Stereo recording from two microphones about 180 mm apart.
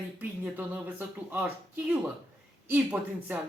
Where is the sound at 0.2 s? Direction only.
10° right (ahead or behind).